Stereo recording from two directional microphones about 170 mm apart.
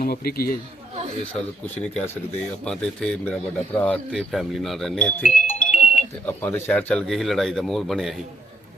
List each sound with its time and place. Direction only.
0.0 s speech: 60° left (ahead or behind)
1.2 s speech: 10° left (ahead or behind)
5.5 s music: 45° left (ahead or behind)
6.0 s speech: 10° left (ahead or behind)